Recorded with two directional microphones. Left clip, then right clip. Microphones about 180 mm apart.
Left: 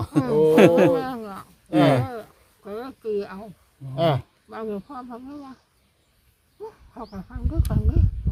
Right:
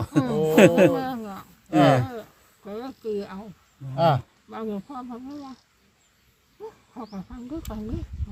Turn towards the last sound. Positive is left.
turn(degrees=0)  # may be behind; listen again after turning